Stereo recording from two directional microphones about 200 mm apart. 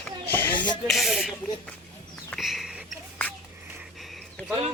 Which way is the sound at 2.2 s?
Centre (ahead or behind).